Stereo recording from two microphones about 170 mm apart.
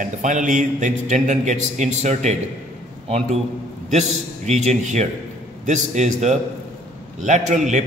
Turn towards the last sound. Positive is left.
turn(degrees=-45)  # may be behind; listen again after turning